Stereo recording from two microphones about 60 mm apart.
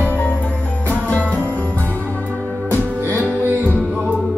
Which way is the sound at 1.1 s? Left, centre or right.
Left.